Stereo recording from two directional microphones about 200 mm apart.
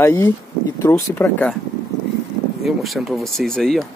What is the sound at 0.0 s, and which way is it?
Speech, 15° left (ahead or behind).